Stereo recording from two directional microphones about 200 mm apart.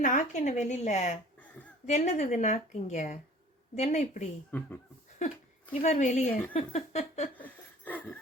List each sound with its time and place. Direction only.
0.0 s speech: 40° left (ahead or behind)
5.8 s speech: 35° left (ahead or behind)
7.3 s a sound: 10° left (ahead or behind)